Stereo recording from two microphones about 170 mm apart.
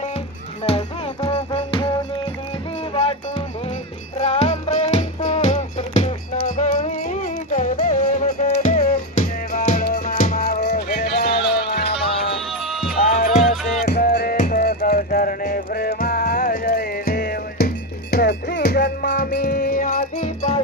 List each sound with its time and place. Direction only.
0.6 s music: 35° left (ahead or behind); by 10.7 s 60° left (ahead or behind)
10.7 s music: 45° left (ahead or behind)
11.0 s music: 75° left (ahead or behind)
12.5 s music: centre (ahead or behind)
13.3 s music: 45° left (ahead or behind)
13.9 s music: 70° left (ahead or behind)
14.3 s music: 55° left (ahead or behind)